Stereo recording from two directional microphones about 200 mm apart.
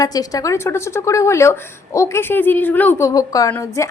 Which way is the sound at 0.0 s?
20° left (ahead or behind).